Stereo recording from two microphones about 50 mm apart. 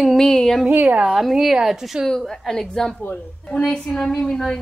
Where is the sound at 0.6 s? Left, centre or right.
Right.